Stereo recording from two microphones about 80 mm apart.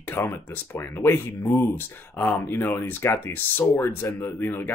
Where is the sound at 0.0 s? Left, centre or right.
Left.